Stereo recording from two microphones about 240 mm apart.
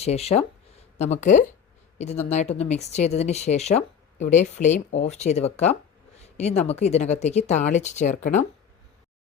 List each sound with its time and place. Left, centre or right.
0.0 s speech: left